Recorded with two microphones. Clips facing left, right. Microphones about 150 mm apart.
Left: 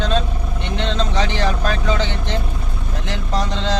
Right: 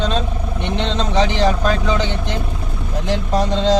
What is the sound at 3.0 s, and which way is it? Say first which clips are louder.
Speech: right 5 dB; 15° right (ahead or behind).